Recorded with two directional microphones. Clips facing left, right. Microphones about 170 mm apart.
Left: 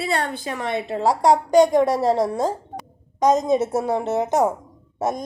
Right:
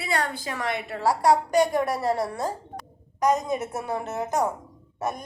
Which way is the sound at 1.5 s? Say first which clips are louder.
Left 7 dB; 90° left.